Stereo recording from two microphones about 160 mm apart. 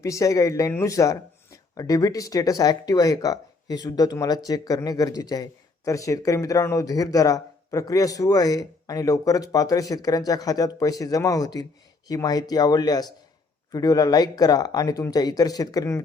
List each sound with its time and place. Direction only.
0.0 s speech: 20° left (ahead or behind)